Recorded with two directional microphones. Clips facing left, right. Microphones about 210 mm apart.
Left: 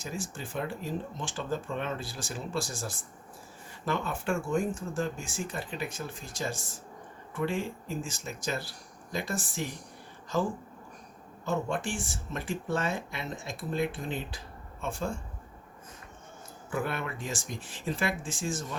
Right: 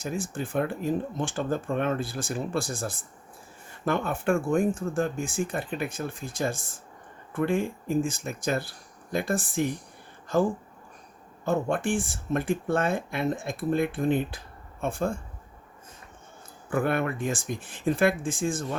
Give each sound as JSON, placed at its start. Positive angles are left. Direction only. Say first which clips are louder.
{"t": 0.0, "sound": "speech", "louder": "right 6 dB", "side_deg": -55}
{"t": 16.6, "sound": "speech", "louder": "right 7 dB", "side_deg": -55}